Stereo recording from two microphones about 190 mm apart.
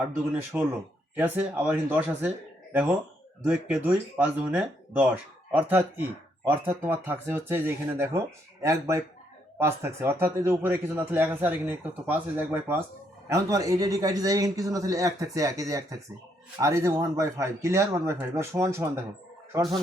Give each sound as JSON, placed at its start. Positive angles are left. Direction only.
{"t": 0.0, "sound": "a man's voice", "side_deg": -5}
{"t": 3.4, "sound": "a man's voice", "side_deg": -5}